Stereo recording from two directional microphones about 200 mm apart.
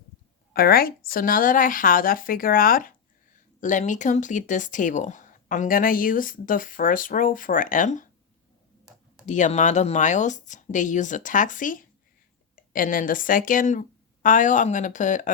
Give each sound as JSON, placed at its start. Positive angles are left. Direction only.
{"t": 0.5, "sound": "speech", "side_deg": 50}
{"t": 9.2, "sound": "a woman's voice", "side_deg": 40}